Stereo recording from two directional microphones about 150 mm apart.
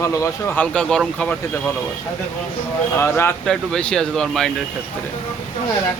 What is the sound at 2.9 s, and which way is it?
Speech, 15° left (ahead or behind).